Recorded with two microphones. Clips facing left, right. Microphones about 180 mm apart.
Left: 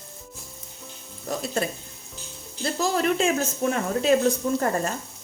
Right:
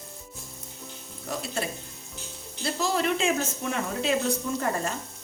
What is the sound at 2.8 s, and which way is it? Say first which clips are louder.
Speech: left 3 dB; 45° left (ahead or behind).